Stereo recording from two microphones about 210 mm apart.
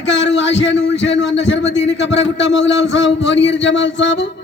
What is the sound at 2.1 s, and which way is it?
Speech, 60° left (ahead or behind).